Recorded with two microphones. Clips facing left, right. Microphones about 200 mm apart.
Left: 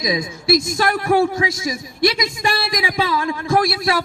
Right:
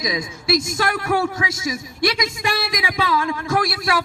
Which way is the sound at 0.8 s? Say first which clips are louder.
Left 4 dB; 35° left (ahead or behind).